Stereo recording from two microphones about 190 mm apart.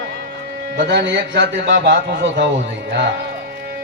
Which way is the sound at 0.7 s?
60° right (ahead or behind).